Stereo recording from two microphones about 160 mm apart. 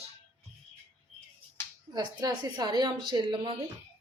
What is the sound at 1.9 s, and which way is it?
A woman's voice, 25° right (ahead or behind).